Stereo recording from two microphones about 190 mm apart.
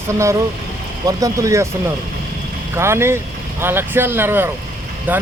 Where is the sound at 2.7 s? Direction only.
15° right (ahead or behind).